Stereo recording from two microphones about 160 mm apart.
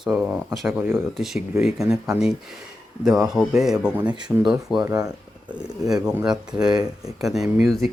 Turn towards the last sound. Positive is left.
turn(degrees=0)  # may be behind; listen again after turning